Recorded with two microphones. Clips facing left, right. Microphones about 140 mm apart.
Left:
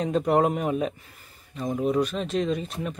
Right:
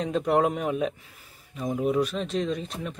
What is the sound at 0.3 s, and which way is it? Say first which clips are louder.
Speech: left 1 dB; centre (ahead or behind).